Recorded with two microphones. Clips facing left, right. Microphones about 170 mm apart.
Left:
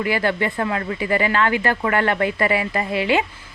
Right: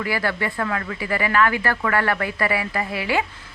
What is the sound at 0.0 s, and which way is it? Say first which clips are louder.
Speech: left 4 dB; 20° left (ahead or behind).